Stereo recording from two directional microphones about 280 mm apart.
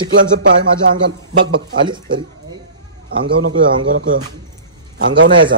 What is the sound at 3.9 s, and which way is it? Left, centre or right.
Speech, right.